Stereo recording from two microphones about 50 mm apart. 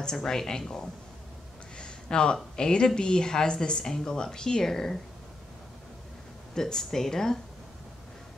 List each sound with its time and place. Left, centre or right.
0.0 s speech: centre
1.8 s a sound: centre
2.5 s speech: centre
6.5 s speech: centre